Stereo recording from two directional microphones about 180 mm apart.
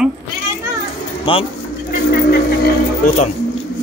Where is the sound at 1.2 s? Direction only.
30° left (ahead or behind).